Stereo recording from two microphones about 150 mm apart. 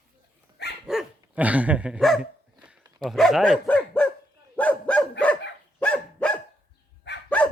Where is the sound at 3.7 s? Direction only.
10° left (ahead or behind).